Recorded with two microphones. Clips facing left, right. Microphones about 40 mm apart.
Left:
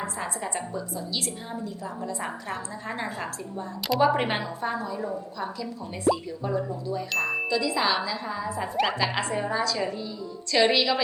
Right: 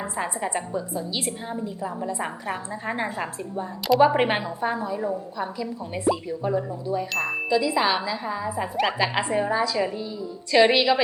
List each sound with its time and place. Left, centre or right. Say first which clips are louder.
0.0 s a woman's voice: right 3 dB; right
7.1 s chime: even; centre
7.5 s a woman's voice: right 5 dB; centre
8.7 s a woman's voice: right 2 dB; centre